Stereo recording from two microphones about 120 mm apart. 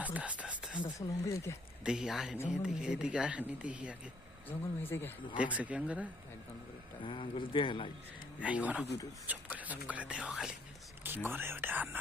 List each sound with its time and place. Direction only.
0.0 s whispering: 10° right (ahead or behind)
0.9 s speech: 25° left (ahead or behind)
1.8 s speech: 5° right (ahead or behind)
4.4 s speech: 20° left (ahead or behind)
5.4 s speech: 10° right (ahead or behind)
7.0 s speech: 45° left (ahead or behind)
8.4 s speech: 10° right (ahead or behind)
11.0 s speech: 15° right (ahead or behind)